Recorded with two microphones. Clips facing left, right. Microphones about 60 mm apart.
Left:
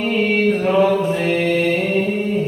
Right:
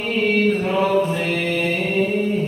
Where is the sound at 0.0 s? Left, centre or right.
Centre.